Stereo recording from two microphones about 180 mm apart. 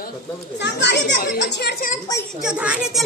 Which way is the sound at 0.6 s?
75° left (ahead or behind).